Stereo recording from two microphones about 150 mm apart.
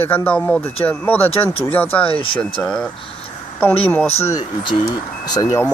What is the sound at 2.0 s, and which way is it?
Speech, 35° left (ahead or behind).